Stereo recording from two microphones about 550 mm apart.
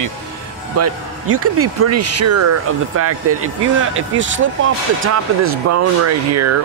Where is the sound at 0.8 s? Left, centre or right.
Right.